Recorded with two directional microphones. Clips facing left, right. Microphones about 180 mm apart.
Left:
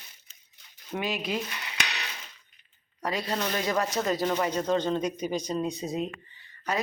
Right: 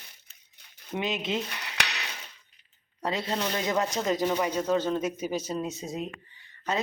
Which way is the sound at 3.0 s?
25° right (ahead or behind).